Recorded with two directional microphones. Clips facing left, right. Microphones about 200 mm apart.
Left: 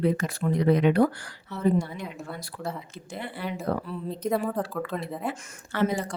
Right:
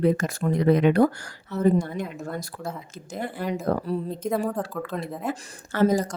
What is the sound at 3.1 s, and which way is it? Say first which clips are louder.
Speech: right 5 dB; 45° right (ahead or behind).